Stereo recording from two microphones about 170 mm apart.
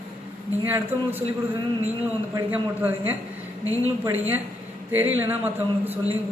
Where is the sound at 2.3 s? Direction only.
10° right (ahead or behind).